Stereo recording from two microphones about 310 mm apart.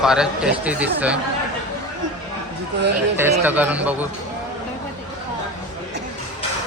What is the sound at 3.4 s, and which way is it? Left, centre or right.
Speech, centre.